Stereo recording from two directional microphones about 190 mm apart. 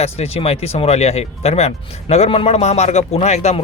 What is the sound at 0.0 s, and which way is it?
Speech, 35° left (ahead or behind).